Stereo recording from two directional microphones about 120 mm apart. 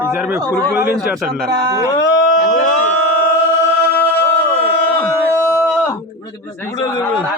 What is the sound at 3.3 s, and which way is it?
Chant, 20° left (ahead or behind).